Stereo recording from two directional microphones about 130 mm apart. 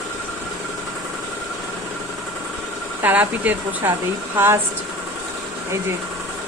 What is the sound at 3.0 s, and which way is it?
Speech, 15° right (ahead or behind).